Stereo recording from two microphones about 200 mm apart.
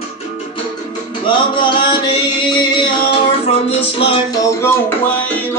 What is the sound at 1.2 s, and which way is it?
Music, 25° left (ahead or behind).